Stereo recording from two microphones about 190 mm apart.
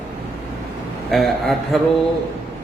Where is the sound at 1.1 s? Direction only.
Centre (ahead or behind).